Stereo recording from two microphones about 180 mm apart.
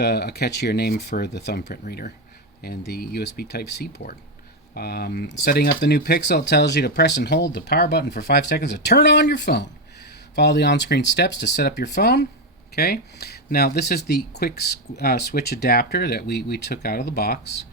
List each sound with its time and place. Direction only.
0.0 s speech: 65° left (ahead or behind)
1.8 s speech: 50° left (ahead or behind); by 17.7 s 70° left (ahead or behind)